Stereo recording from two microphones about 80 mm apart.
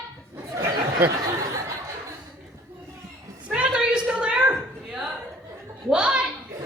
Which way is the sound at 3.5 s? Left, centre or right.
Centre.